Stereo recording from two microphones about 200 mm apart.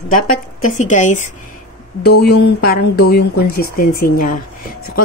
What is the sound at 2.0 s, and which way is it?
Speech, 55° left (ahead or behind).